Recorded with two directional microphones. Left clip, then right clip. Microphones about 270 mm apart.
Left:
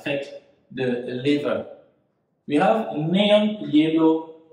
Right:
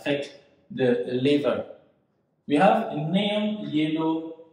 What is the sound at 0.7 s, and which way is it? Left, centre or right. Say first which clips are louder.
Speech: right 2 dB; centre.